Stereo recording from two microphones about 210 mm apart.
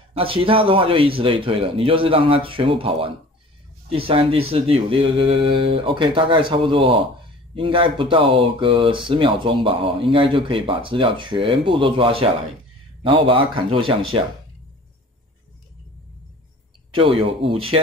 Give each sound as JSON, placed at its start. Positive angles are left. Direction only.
{"t": 0.1, "sound": "speech", "side_deg": -25}
{"t": 16.9, "sound": "speech", "side_deg": -25}